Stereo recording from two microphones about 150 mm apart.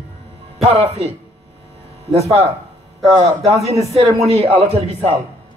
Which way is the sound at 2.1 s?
45° right (ahead or behind).